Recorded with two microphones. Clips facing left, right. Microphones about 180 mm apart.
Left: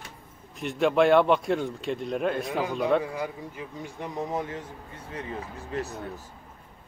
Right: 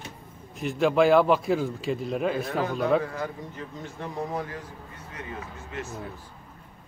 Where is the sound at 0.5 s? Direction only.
Centre (ahead or behind).